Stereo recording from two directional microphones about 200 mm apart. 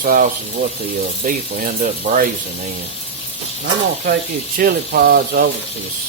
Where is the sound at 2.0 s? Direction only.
40° right (ahead or behind).